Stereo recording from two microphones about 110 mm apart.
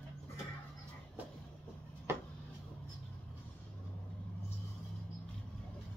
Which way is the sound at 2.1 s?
20° right (ahead or behind).